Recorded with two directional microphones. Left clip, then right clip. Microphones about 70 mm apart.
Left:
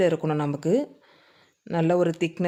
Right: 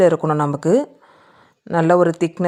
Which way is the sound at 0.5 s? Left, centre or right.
Right.